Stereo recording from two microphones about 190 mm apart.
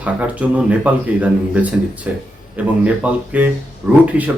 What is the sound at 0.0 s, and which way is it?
A man's voice, 5° right (ahead or behind).